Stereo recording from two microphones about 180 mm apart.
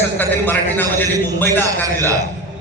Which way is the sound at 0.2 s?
10° left (ahead or behind).